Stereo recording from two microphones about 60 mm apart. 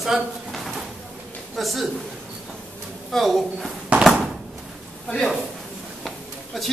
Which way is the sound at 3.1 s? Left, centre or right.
Centre.